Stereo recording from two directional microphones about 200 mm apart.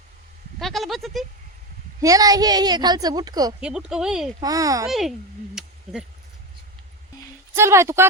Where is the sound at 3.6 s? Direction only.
5° right (ahead or behind).